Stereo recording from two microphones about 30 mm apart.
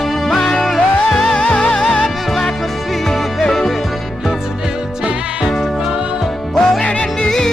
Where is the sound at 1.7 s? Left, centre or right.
Centre.